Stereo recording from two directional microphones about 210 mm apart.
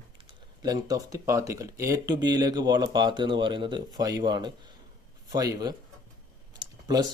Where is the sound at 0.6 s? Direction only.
15° right (ahead or behind).